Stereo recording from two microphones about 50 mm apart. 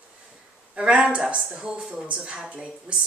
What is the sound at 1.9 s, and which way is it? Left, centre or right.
A woman's voice, centre.